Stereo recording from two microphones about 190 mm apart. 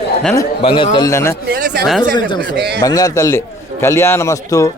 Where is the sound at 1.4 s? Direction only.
60° right (ahead or behind).